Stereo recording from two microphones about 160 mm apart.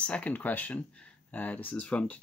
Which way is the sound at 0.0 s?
10° left (ahead or behind).